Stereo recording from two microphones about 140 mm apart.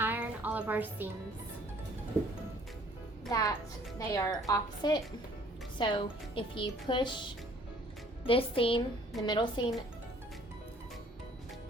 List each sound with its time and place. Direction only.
0.0 s music: 15° right (ahead or behind)
3.2 s a woman's voice: 25° left (ahead or behind)